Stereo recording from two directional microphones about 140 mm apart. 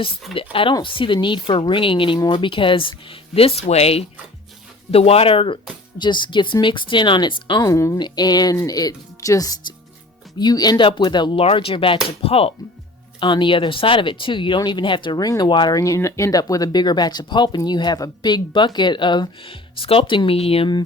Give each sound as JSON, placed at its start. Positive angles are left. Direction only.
{"t": 0.5, "sound": "speech", "side_deg": 35}
{"t": 7.7, "sound": "speech", "side_deg": 20}